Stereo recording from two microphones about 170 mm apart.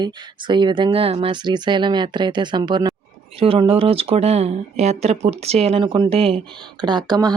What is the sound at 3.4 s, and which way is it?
Speech, 35° right (ahead or behind).